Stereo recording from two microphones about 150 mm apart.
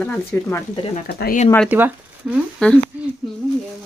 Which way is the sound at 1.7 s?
10° right (ahead or behind).